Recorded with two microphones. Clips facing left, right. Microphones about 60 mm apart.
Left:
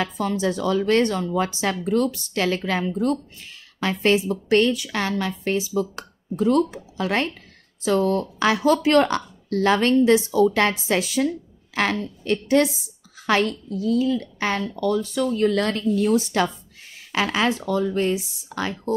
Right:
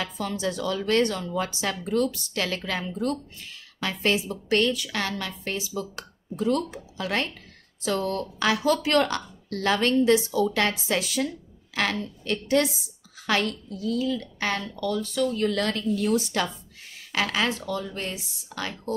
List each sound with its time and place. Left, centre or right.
0.0 s a woman's voice: left
17.1 s a woman's voice: left